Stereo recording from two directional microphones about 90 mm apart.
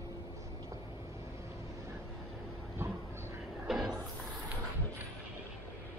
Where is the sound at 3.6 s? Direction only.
5° right (ahead or behind).